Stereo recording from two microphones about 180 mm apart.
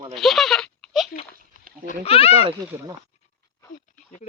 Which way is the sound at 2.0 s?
35° left (ahead or behind).